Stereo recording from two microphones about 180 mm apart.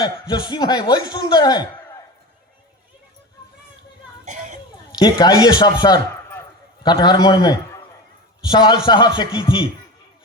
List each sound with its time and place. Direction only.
0.0 s speech: 25° left (ahead or behind)
4.3 s a sound: 40° right (ahead or behind)
4.9 s a man's voice: 20° left (ahead or behind)